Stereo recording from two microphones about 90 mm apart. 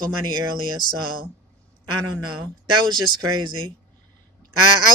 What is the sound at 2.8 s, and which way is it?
Speech, 55° right (ahead or behind).